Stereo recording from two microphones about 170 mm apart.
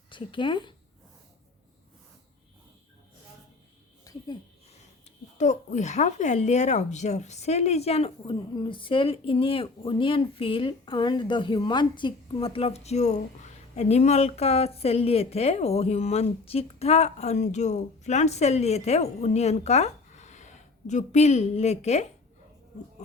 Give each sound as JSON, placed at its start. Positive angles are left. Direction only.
{"t": 0.1, "sound": "speech", "side_deg": 30}
{"t": 4.1, "sound": "a sound", "side_deg": 20}
{"t": 5.4, "sound": "speech", "side_deg": 45}